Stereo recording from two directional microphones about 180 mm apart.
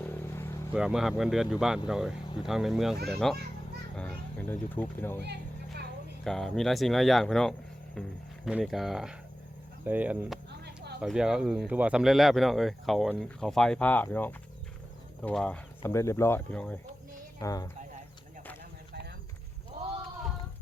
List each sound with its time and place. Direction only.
0.0 s vehicle: 10° left (ahead or behind)
0.7 s a child's voice: 5° right (ahead or behind)
5.2 s a sound: 65° right (ahead or behind)
6.2 s speech: centre (ahead or behind)
17.4 s speech: 20° left (ahead or behind)